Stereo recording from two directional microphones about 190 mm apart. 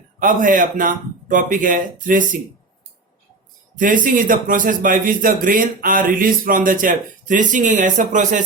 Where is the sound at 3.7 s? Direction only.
45° right (ahead or behind).